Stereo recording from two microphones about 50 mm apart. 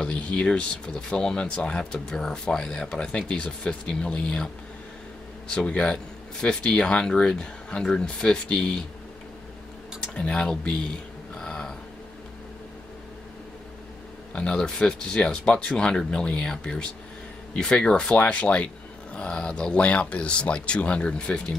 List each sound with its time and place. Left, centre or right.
0.0 s speech: left
5.5 s speech: centre
10.1 s speech: centre
11.3 s a sound: centre
14.3 s speech: left